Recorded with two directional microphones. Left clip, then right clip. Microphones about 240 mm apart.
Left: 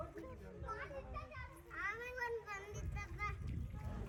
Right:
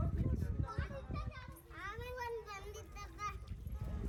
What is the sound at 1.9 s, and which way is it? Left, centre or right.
Children playing, right.